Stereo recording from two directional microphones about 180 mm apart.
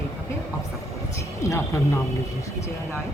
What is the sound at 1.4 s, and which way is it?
Speech, 15° left (ahead or behind).